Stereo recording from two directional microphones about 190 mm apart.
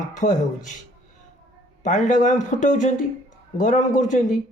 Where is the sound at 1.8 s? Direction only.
40° left (ahead or behind).